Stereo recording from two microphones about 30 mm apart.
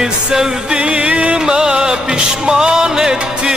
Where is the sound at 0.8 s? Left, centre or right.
Right.